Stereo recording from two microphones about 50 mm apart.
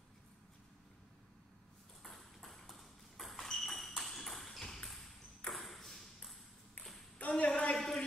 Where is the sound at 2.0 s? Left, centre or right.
Centre.